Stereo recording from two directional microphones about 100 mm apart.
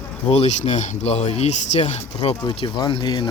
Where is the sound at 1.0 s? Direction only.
90° left.